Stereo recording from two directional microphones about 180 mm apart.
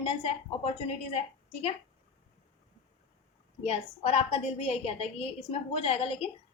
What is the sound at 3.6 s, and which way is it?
A woman's voice, 35° left (ahead or behind).